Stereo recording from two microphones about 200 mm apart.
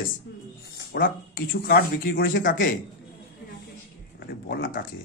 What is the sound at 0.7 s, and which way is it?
Speech, 45° left (ahead or behind).